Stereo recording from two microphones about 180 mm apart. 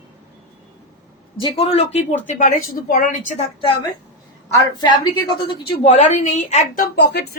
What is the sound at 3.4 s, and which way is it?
Speech, 30° left (ahead or behind).